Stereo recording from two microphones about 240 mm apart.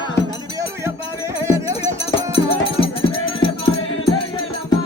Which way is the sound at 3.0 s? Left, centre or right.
Left.